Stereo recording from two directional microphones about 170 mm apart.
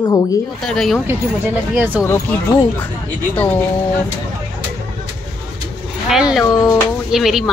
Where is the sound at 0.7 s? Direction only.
5° left (ahead or behind).